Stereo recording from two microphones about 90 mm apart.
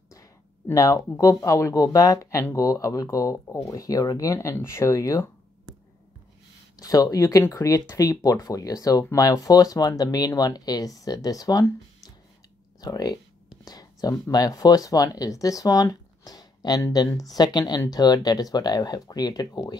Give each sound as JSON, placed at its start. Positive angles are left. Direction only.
{"t": 0.7, "sound": "speech", "side_deg": 40}
{"t": 6.8, "sound": "speech", "side_deg": 40}
{"t": 12.8, "sound": "speech", "side_deg": 50}
{"t": 13.7, "sound": "a sound", "side_deg": 45}
{"t": 14.3, "sound": "speech", "side_deg": 45}